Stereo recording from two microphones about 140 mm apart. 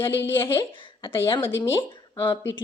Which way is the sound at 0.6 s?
35° left (ahead or behind).